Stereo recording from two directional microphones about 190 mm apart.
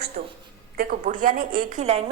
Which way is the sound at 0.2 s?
45° right (ahead or behind).